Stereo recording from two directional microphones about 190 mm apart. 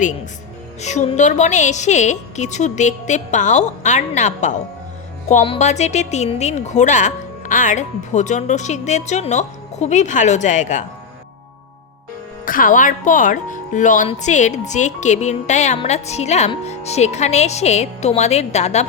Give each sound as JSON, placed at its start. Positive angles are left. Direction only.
{"t": 0.8, "sound": "a woman's voice", "side_deg": 40}
{"t": 12.5, "sound": "a woman's voice", "side_deg": 45}